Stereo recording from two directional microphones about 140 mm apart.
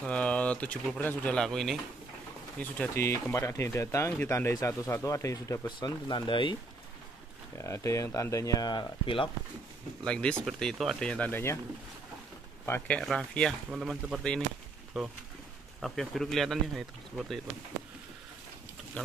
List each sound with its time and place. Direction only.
0.0 s speech: 10° left (ahead or behind)
2.8 s speech: 15° left (ahead or behind); by 6.6 s 35° left (ahead or behind)
7.5 s speech: 20° left (ahead or behind); by 9.3 s 35° left (ahead or behind)
10.0 s speech: 10° left (ahead or behind)
12.6 s speech: 15° left (ahead or behind)